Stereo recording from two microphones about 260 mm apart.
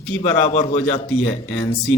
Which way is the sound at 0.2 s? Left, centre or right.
Left.